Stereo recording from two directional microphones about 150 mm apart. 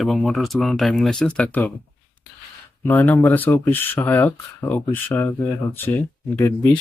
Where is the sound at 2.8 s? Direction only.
10° left (ahead or behind).